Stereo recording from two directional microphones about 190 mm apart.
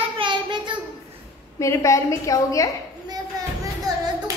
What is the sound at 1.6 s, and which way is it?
A woman's voice, 15° left (ahead or behind).